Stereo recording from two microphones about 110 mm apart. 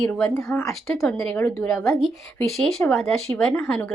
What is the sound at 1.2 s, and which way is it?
Speech, 15° left (ahead or behind).